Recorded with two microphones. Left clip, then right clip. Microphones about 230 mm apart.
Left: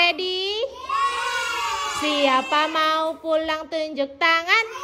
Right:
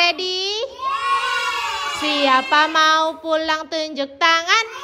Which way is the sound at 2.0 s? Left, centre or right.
Centre.